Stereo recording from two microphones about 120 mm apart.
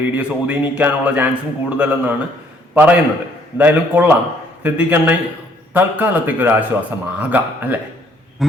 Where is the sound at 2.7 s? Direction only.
10° right (ahead or behind).